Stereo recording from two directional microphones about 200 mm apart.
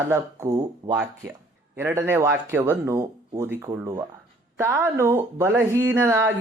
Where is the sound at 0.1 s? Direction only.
15° right (ahead or behind).